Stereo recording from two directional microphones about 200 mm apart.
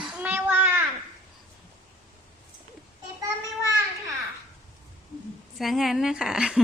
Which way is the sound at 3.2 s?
15° right (ahead or behind).